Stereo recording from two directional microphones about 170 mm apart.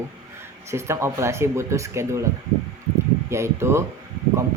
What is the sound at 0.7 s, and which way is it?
Speech, 15° right (ahead or behind).